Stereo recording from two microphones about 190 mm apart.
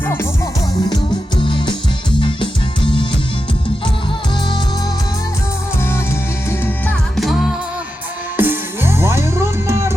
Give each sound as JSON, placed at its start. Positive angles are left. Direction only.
{"t": 1.4, "sound": "music", "side_deg": 25}
{"t": 6.8, "sound": "music", "side_deg": 0}
{"t": 8.4, "sound": "music", "side_deg": -10}